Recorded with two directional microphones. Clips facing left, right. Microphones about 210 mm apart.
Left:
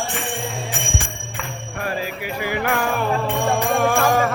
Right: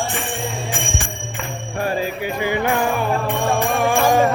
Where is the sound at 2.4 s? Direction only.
25° right (ahead or behind).